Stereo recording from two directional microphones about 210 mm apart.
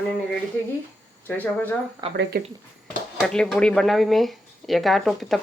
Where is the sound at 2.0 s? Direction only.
25° right (ahead or behind).